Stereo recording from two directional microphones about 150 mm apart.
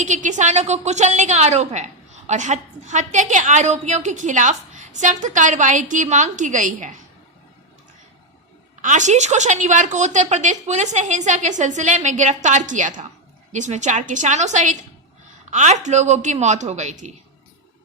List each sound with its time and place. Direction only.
0.0 s a woman's voice: 55° right (ahead or behind)
8.8 s a woman's voice: 55° right (ahead or behind)